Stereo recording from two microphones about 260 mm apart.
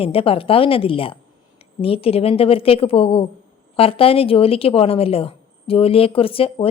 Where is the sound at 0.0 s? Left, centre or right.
Left.